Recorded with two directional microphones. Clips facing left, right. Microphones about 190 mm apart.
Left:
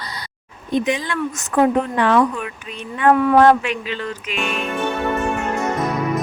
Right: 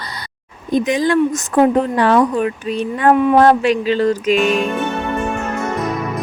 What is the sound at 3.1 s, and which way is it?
Speech, 20° right (ahead or behind).